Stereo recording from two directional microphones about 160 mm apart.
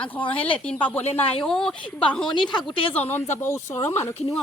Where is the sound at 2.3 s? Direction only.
30° left (ahead or behind).